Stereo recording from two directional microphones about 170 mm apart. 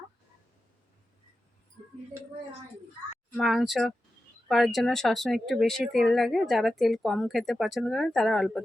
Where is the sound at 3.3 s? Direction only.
Centre (ahead or behind).